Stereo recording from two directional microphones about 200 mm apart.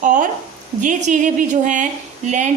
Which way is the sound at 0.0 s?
40° right (ahead or behind).